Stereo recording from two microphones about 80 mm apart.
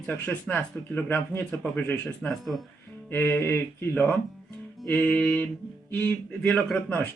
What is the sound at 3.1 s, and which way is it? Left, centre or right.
Speech, left.